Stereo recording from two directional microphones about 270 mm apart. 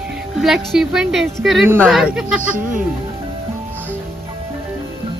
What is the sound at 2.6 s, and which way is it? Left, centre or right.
Speech, right.